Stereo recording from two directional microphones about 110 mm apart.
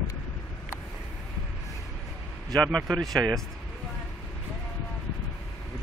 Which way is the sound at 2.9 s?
5° left (ahead or behind).